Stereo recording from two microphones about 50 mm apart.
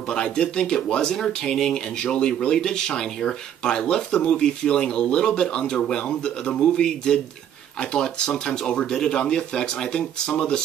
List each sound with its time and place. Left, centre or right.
0.1 s speech: centre
8.9 s speech: centre